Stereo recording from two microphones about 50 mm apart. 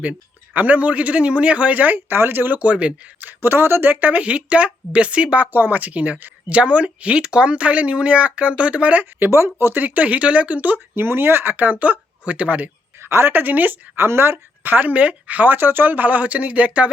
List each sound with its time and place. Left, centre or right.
0.5 s speech: right
2.1 s speech: right
2.6 s speech: right
3.4 s speech: right
4.0 s speech: right
5.5 s speech: right
9.3 s speech: right
9.8 s speech: right
10.9 s a woman's voice: right
13.0 s a woman's voice: right
13.3 s a woman's voice: right